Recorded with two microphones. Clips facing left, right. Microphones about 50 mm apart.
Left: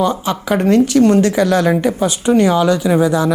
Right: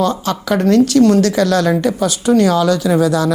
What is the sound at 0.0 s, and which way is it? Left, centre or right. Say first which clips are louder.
A woman's voice: even; centre.